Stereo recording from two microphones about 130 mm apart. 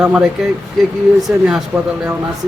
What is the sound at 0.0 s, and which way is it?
Speech, 5° right (ahead or behind).